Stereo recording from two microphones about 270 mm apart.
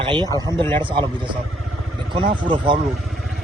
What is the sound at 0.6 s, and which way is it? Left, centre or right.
Speech, centre.